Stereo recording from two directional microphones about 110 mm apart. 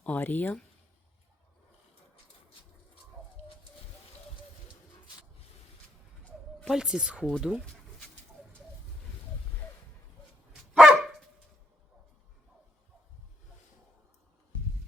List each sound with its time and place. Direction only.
0.0 s speech: 15° left (ahead or behind)
6.7 s speech: 5° right (ahead or behind)
7.6 s bird: 10° left (ahead or behind)
10.8 s dog: 5° right (ahead or behind)